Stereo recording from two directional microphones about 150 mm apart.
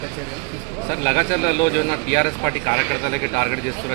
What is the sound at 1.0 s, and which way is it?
A man's voice, 60° left (ahead or behind).